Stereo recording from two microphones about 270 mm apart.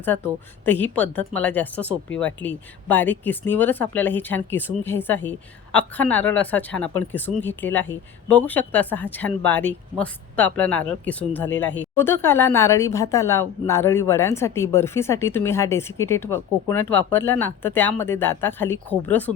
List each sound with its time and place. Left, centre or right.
0.6 s speech: centre